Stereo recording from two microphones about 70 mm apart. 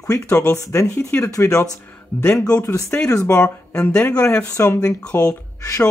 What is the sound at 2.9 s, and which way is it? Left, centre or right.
Speech, left.